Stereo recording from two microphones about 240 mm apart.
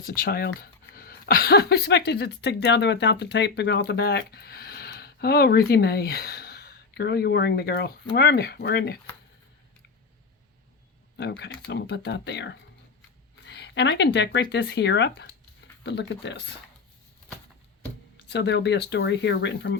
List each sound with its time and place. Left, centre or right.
0.0 s speech: left
11.2 s speech: left
18.2 s speech: left